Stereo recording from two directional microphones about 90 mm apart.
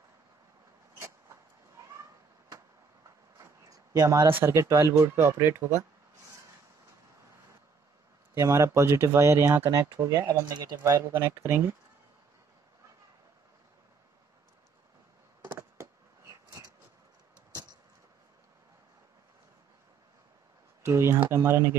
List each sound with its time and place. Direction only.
3.3 s a sound: 45° right (ahead or behind)
4.3 s speech: 25° right (ahead or behind)
8.4 s speech: 35° right (ahead or behind)
10.3 s speech: 45° right (ahead or behind)
10.8 s speech: 35° right (ahead or behind)
11.1 s speech: 25° right (ahead or behind)
16.4 s a sound: 40° right (ahead or behind)
20.8 s speech: 30° right (ahead or behind)